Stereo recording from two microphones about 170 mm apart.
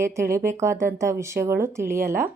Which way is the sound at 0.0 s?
15° right (ahead or behind).